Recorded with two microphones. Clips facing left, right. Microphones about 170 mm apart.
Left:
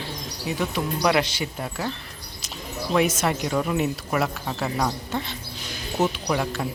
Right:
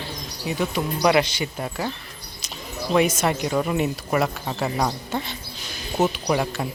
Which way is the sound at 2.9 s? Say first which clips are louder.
Right 2 dB; centre (ahead or behind).